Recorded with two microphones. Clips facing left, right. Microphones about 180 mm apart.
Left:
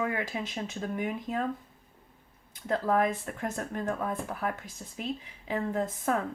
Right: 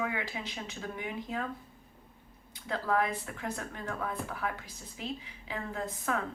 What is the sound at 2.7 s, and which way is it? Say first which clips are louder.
Speech: left 4 dB; 50° left (ahead or behind).